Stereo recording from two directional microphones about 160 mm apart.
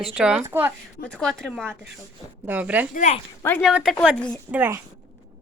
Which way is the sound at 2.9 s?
50° left (ahead or behind).